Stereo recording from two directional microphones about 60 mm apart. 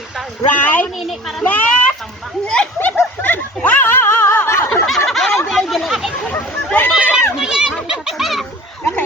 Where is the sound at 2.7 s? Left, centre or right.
Left.